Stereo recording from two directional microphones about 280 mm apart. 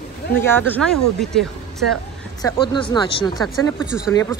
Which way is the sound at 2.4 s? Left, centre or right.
Centre.